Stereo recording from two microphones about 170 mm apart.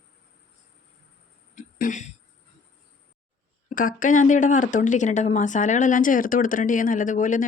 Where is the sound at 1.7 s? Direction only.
50° left (ahead or behind).